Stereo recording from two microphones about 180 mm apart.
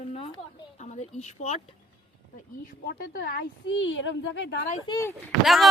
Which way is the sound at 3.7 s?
90° left.